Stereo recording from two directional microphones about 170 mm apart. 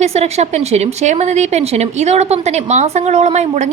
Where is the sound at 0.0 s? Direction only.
40° right (ahead or behind).